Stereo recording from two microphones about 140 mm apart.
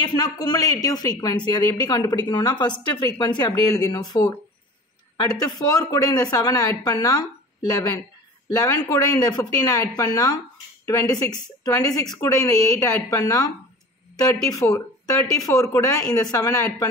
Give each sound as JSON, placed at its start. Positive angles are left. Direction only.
{"t": 0.1, "sound": "speech", "side_deg": 30}
{"t": 14.5, "sound": "speech", "side_deg": 20}